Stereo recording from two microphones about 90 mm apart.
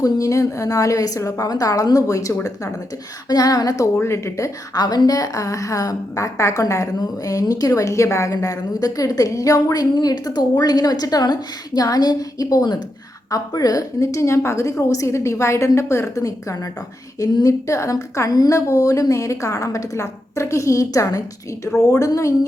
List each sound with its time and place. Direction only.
0.0 s a woman's voice: 35° left (ahead or behind)
3.9 s speech: 30° left (ahead or behind)
4.7 s a woman's voice: 50° left (ahead or behind)